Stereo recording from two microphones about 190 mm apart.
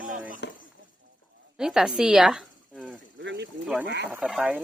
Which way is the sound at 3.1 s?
75° right (ahead or behind).